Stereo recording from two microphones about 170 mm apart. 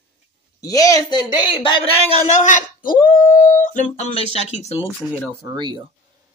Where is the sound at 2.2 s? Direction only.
45° left (ahead or behind).